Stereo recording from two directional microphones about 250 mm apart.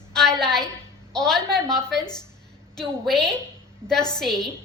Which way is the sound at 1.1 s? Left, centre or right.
Centre.